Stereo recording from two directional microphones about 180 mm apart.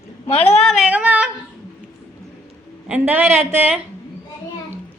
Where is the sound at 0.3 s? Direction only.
35° left (ahead or behind).